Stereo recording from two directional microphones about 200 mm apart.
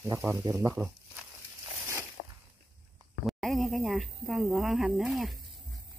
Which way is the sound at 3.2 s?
Centre (ahead or behind).